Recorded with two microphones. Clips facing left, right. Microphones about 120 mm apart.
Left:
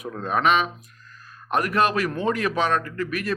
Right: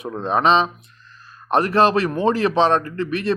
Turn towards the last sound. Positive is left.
turn(degrees=-25)  # may be behind; listen again after turning